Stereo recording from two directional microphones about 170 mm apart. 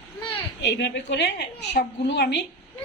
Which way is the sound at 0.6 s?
90° left.